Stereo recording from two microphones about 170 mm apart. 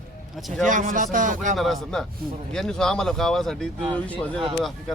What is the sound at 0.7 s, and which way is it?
Speech, 50° right (ahead or behind).